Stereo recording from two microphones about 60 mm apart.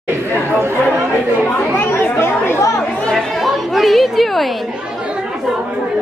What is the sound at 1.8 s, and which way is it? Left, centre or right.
Chatter, left.